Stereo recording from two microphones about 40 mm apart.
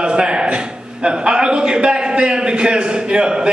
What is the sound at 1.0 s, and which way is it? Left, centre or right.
A man's voice, right.